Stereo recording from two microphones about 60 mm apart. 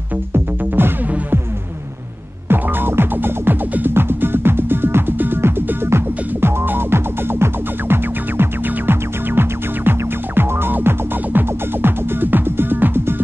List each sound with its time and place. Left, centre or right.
0.3 s music: right
2.4 s music: right